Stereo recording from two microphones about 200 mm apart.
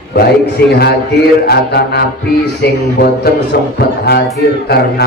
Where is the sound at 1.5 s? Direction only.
50° left (ahead or behind).